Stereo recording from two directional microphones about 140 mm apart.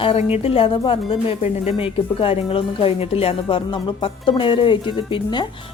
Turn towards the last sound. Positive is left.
turn(degrees=35)  # may be behind; listen again after turning